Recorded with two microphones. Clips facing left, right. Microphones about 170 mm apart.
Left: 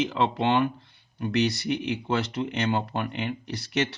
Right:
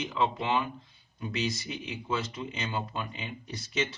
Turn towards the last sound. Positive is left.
turn(degrees=70)  # may be behind; listen again after turning